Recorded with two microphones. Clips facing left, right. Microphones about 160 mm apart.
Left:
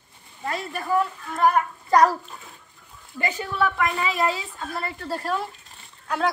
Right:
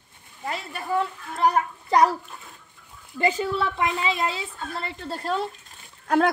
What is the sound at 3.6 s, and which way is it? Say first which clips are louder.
A woman's voice: left 2 dB; 25° right (ahead or behind).